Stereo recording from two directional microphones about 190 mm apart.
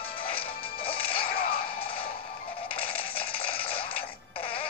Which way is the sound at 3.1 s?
30° left (ahead or behind).